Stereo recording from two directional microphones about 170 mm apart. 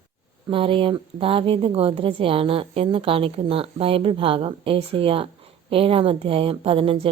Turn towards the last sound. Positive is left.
turn(degrees=-30)  # may be behind; listen again after turning